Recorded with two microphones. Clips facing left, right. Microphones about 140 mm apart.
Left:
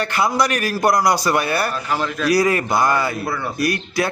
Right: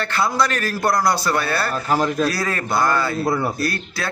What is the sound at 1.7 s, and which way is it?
Speech, 40° right (ahead or behind).